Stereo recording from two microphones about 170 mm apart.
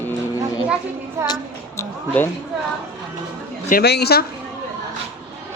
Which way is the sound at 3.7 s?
65° left (ahead or behind).